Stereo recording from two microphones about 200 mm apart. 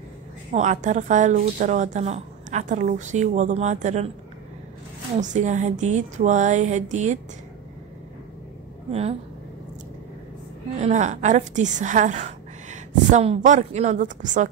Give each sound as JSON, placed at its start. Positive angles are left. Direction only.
{"t": 0.5, "sound": "a woman's voice", "side_deg": -35}
{"t": 5.2, "sound": "a woman's voice", "side_deg": -40}
{"t": 10.8, "sound": "a woman's voice", "side_deg": -35}